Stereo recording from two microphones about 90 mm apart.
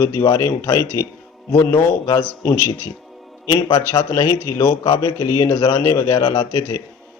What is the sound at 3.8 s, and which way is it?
A man's voice, 25° left (ahead or behind).